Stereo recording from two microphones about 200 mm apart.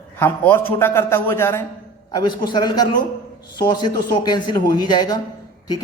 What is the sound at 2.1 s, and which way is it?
A man's voice, 20° left (ahead or behind).